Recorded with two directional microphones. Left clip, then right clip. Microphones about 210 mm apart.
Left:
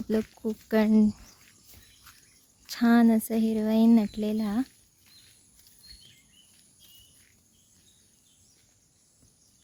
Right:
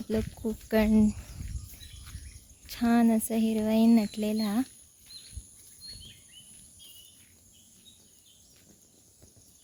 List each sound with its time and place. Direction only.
0.1 s speech: 15° left (ahead or behind)
1.4 s a sound: 20° left (ahead or behind)
2.6 s speech: 20° left (ahead or behind)